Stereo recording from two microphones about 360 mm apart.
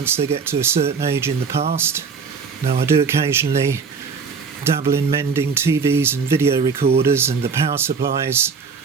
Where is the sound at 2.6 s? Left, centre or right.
Centre.